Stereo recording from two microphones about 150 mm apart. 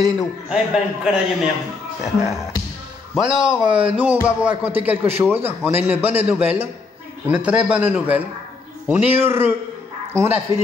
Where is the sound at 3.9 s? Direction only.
10° right (ahead or behind).